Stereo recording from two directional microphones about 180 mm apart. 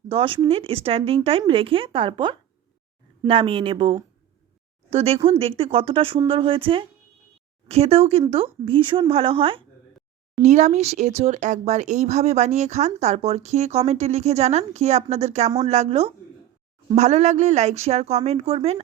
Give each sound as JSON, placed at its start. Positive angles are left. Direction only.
{"t": 0.1, "sound": "speech", "side_deg": -30}
{"t": 10.4, "sound": "speech", "side_deg": -40}